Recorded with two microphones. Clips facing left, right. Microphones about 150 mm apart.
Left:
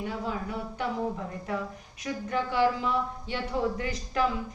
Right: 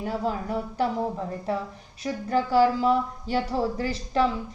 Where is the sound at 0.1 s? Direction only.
40° right (ahead or behind).